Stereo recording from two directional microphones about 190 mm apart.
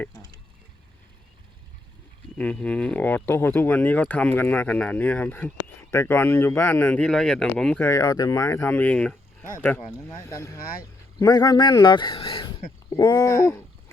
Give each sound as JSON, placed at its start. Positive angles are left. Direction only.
{"t": 2.4, "sound": "speech", "side_deg": 5}
{"t": 7.9, "sound": "speech", "side_deg": 15}